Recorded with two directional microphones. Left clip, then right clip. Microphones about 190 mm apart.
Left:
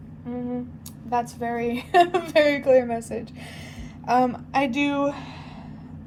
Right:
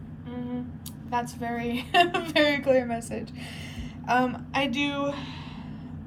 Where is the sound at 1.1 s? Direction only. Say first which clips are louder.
Left 4 dB; 30° left (ahead or behind).